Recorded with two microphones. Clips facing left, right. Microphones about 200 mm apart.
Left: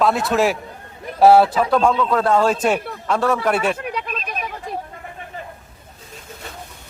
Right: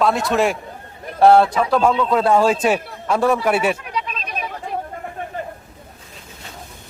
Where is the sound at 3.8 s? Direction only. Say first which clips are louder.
Left 1 dB; 55° left (ahead or behind).